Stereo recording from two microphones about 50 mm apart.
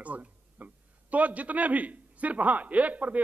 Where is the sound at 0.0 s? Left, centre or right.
Right.